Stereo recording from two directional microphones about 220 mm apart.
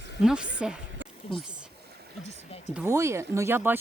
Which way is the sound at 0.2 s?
Centre (ahead or behind).